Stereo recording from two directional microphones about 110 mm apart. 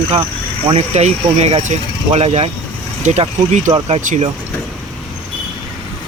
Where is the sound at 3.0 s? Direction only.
90° right.